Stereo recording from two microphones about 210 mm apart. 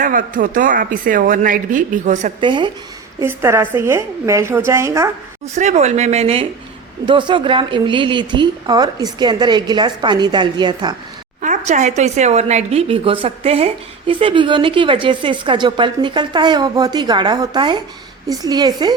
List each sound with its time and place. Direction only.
0.0 s speech: 40° right (ahead or behind)
2.4 s a woman's voice: 20° right (ahead or behind)
3.2 s a woman's voice: 10° right (ahead or behind)
5.5 s a woman's voice: 30° right (ahead or behind)
11.3 s a woman's voice: 35° right (ahead or behind); by 18.9 s 20° right (ahead or behind)